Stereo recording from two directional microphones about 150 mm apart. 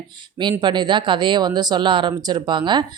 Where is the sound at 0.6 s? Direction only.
30° right (ahead or behind).